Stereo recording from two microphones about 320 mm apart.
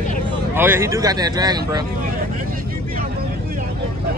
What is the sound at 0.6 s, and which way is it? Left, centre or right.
A man's voice, centre.